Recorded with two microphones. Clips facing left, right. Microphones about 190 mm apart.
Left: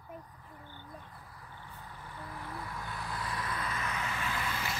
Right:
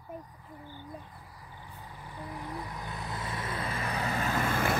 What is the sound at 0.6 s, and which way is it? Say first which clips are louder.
Music: right 5 dB; 10° right (ahead or behind).